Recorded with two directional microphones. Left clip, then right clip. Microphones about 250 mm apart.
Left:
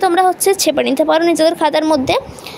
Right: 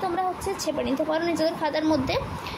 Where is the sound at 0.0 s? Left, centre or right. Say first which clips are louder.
Left 14 dB; left.